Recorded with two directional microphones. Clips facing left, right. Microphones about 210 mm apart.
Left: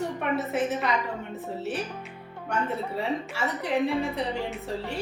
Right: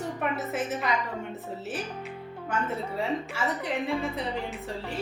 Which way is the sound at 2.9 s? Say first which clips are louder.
Even; centre (ahead or behind).